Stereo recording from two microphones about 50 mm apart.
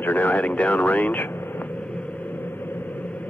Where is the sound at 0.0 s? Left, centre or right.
Left.